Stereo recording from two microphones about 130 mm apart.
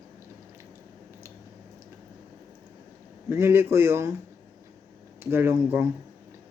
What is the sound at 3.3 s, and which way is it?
Speech, 20° right (ahead or behind).